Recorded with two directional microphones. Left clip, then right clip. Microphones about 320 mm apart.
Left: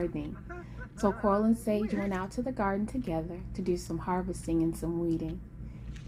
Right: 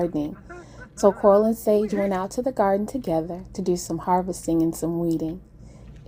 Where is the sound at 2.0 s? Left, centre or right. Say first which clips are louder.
Right 10 dB; centre.